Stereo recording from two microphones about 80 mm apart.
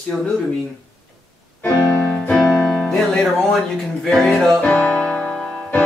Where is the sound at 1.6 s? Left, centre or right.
Centre.